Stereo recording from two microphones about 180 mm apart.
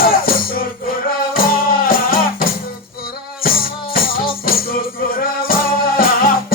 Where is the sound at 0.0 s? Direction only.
55° left (ahead or behind).